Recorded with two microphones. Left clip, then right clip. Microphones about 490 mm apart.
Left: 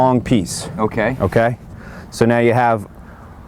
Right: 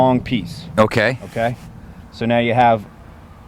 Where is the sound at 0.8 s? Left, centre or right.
Right.